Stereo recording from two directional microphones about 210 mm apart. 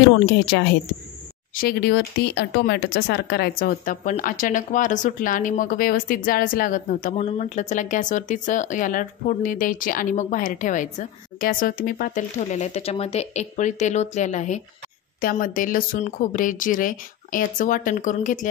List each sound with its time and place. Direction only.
1.5 s speech: 45° left (ahead or behind)